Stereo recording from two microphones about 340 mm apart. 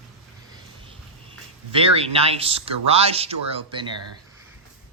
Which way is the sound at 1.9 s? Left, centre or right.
Centre.